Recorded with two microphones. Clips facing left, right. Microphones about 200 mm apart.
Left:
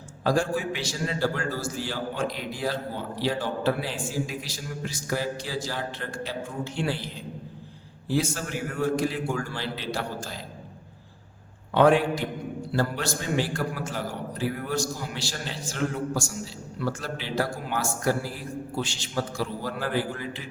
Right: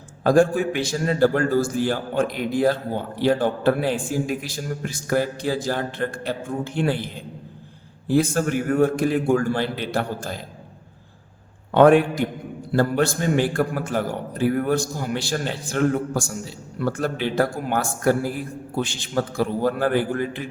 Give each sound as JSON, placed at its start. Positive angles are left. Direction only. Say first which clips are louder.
{"t": 0.3, "sound": "a man's voice", "louder": "right 8 dB", "side_deg": -55}
{"t": 11.7, "sound": "a man's voice", "louder": "right 5 dB", "side_deg": -55}